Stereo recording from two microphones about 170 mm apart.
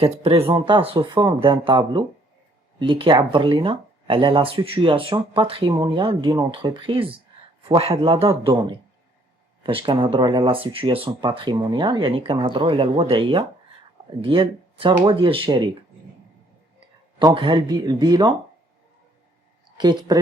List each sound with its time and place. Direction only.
0.0 s speech: 35° right (ahead or behind)
17.2 s speech: 30° right (ahead or behind)
19.7 s speech: 25° right (ahead or behind)